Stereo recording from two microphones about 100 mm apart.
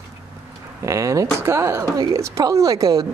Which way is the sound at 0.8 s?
30° right (ahead or behind).